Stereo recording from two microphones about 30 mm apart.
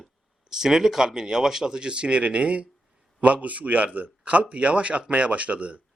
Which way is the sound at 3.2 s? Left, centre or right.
Right.